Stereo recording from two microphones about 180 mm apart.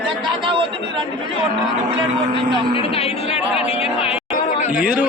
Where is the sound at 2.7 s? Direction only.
35° left (ahead or behind).